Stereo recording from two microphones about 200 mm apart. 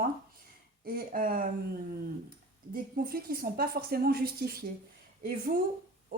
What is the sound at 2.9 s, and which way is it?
A woman's voice, 45° right (ahead or behind).